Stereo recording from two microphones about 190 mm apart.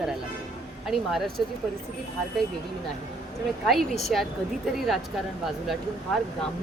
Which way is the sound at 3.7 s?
Centre (ahead or behind).